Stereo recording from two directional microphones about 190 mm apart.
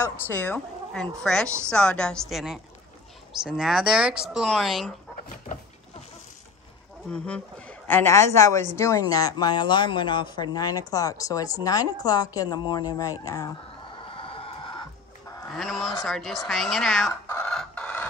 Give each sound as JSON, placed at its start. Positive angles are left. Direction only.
{"t": 0.3, "sound": "speech", "side_deg": 10}
{"t": 7.1, "sound": "a woman's voice", "side_deg": 5}
{"t": 14.0, "sound": "chicken", "side_deg": 30}
{"t": 15.5, "sound": "speech", "side_deg": 0}
{"t": 17.3, "sound": "a sound", "side_deg": 5}